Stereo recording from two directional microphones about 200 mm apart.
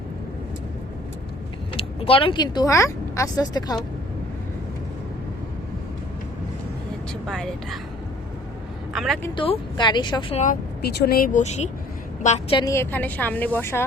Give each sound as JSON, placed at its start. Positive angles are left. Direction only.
{"t": 1.7, "sound": "speech", "side_deg": 25}
{"t": 7.3, "sound": "speech", "side_deg": 0}
{"t": 8.9, "sound": "a woman's voice", "side_deg": 0}
{"t": 9.3, "sound": "a woman's voice", "side_deg": 25}
{"t": 10.4, "sound": "a woman's voice", "side_deg": 45}
{"t": 12.7, "sound": "a woman's voice", "side_deg": 10}